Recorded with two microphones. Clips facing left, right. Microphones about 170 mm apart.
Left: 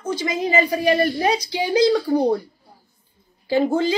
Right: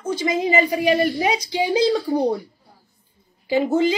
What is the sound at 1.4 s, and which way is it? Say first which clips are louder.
Speech: left 1 dB; 25° right (ahead or behind).